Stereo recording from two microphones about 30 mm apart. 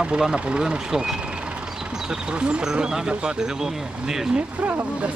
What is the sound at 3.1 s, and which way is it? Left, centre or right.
Speech, right.